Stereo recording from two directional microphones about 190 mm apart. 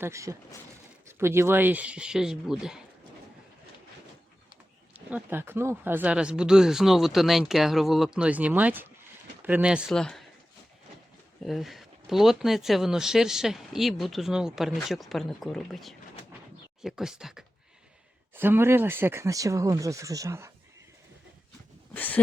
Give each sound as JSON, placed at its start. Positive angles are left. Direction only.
{"t": 0.0, "sound": "speech", "side_deg": -15}
{"t": 4.9, "sound": "speech", "side_deg": -10}
{"t": 11.4, "sound": "speech", "side_deg": 0}
{"t": 21.9, "sound": "a sound", "side_deg": 10}